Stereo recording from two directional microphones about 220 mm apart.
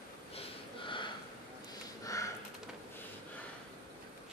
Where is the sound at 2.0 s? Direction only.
15° left (ahead or behind).